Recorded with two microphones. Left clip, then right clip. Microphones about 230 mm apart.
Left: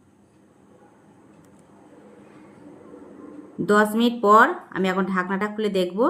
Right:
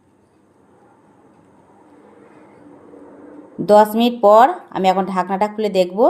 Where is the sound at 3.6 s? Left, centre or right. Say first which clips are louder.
Right 8 dB; centre.